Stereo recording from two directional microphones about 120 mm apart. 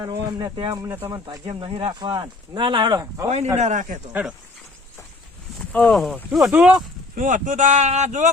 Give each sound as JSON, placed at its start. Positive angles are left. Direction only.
{"t": 0.0, "sound": "speech", "side_deg": -30}
{"t": 1.7, "sound": "speech", "side_deg": -45}
{"t": 3.2, "sound": "a man's voice", "side_deg": -65}
{"t": 3.6, "sound": "speech", "side_deg": -90}
{"t": 4.1, "sound": "speech", "side_deg": -10}
{"t": 5.5, "sound": "speech", "side_deg": 5}
{"t": 6.3, "sound": "speech", "side_deg": -5}
{"t": 7.2, "sound": "speech", "side_deg": -90}